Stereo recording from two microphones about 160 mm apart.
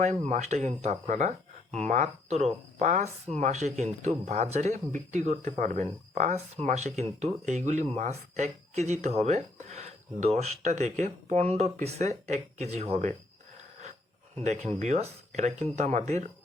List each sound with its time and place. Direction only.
0.0 s speech: 45° right (ahead or behind)
14.3 s speech: 45° right (ahead or behind)